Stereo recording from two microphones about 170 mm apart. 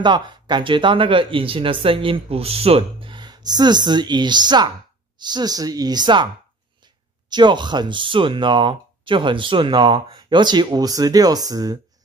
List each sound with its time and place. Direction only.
0.0 s speech: 25° right (ahead or behind)
7.2 s speech: 25° right (ahead or behind)